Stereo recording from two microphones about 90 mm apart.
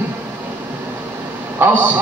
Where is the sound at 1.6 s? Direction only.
20° right (ahead or behind).